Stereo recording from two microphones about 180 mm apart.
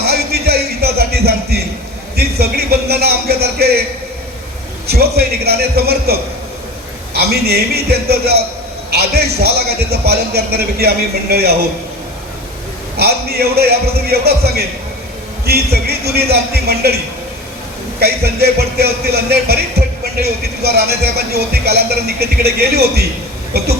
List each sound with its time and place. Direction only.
0.0 s a sound: 60° right (ahead or behind)
4.9 s speech: 60° right (ahead or behind)
13.0 s speech: 60° right (ahead or behind)
18.0 s speech: 60° right (ahead or behind)